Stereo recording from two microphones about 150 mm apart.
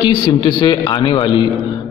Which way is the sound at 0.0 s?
35° left (ahead or behind).